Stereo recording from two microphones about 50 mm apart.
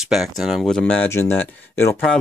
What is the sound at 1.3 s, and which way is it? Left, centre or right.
Speech, left.